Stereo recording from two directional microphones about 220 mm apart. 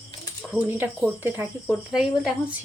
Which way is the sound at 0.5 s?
5° right (ahead or behind).